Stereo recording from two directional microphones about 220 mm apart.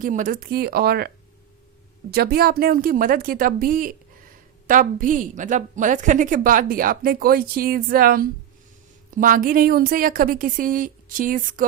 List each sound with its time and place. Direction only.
0.0 s a woman's voice: 35° right (ahead or behind)